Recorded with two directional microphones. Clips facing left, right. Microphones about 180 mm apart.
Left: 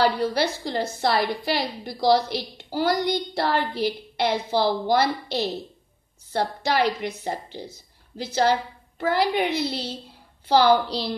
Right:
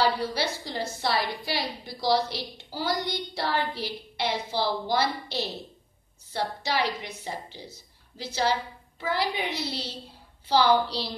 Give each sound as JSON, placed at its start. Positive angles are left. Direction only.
{"t": 0.0, "sound": "a woman's voice", "side_deg": 55}